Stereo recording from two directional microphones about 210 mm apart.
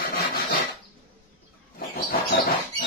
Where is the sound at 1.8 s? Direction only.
45° left (ahead or behind).